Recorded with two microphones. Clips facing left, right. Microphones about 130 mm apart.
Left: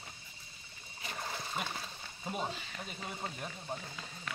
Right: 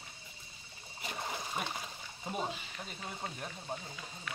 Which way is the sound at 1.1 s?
15° right (ahead or behind).